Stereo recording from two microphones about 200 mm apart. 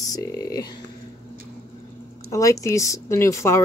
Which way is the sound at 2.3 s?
15° left (ahead or behind).